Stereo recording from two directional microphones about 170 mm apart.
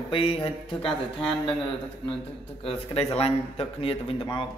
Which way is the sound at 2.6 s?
35° left (ahead or behind).